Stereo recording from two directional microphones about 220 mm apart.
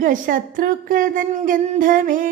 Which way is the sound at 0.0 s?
40° right (ahead or behind).